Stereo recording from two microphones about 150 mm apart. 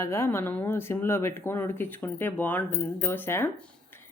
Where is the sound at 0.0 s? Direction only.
15° left (ahead or behind).